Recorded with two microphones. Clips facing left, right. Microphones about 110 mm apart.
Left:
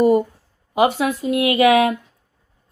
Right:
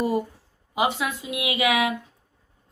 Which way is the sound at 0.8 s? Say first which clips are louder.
Left 7 dB; 50° left (ahead or behind).